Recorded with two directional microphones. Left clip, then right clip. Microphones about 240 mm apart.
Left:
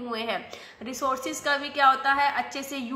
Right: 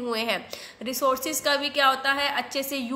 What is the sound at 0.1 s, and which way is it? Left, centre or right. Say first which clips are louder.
A woman's voice: right 2 dB; right.